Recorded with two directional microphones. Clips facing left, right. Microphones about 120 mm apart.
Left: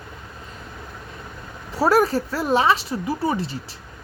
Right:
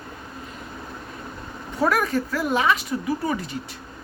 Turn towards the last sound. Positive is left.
turn(degrees=30)  # may be behind; listen again after turning